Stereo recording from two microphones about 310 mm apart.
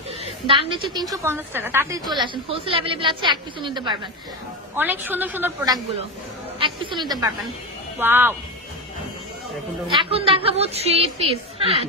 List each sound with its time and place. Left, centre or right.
0.2 s a woman's voice: centre
9.8 s a woman's voice: centre